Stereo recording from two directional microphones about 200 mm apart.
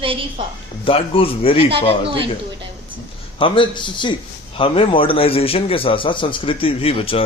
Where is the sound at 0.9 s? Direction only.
25° left (ahead or behind).